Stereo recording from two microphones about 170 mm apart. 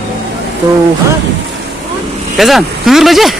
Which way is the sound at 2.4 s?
Centre (ahead or behind).